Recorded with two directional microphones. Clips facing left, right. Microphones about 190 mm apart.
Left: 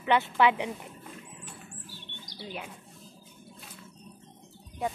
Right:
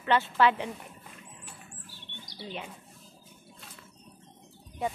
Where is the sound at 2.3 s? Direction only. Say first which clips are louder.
Even; 5° left (ahead or behind).